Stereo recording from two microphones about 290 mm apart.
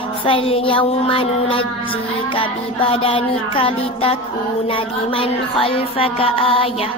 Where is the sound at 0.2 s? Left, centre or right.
Centre.